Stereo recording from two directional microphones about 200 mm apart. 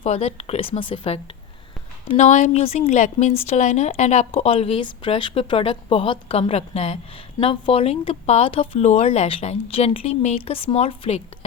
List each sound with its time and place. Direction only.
0.0 s speech: 35° left (ahead or behind)